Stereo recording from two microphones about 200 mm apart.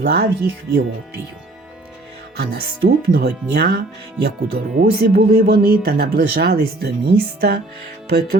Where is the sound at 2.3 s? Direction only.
55° right (ahead or behind).